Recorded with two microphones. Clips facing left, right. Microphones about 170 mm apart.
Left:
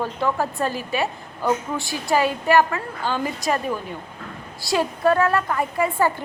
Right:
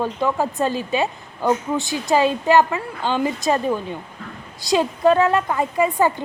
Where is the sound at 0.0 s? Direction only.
15° right (ahead or behind).